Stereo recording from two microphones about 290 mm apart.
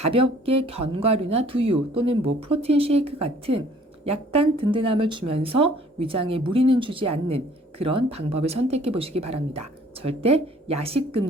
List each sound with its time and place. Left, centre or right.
0.0 s speech: centre